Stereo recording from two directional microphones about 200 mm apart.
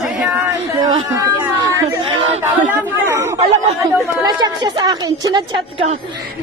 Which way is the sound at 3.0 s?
15° right (ahead or behind).